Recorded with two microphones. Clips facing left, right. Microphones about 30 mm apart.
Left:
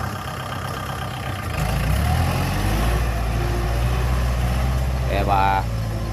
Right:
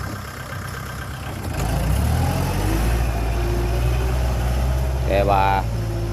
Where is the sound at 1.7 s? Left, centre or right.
Left.